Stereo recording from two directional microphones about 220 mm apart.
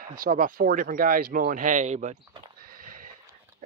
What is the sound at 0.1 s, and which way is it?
Speech, 40° right (ahead or behind).